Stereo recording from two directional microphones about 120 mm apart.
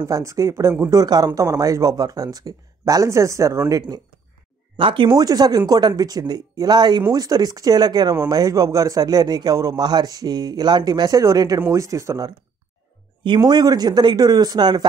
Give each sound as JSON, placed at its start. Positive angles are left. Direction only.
{"t": 0.0, "sound": "speech", "side_deg": -25}
{"t": 4.7, "sound": "speech", "side_deg": -45}
{"t": 13.4, "sound": "speech", "side_deg": -35}